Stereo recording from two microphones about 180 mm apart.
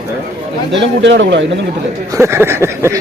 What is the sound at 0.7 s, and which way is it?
Speech, 80° right.